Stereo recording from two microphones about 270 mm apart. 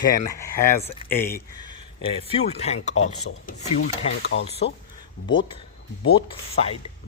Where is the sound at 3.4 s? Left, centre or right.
Left.